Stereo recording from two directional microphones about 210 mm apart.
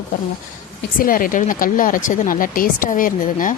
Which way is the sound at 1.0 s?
40° left (ahead or behind).